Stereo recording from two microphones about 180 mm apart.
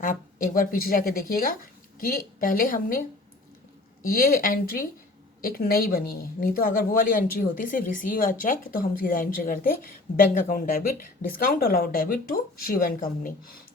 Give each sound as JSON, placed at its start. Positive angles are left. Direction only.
{"t": 0.0, "sound": "a woman's voice", "side_deg": 50}
{"t": 4.0, "sound": "a woman's voice", "side_deg": 55}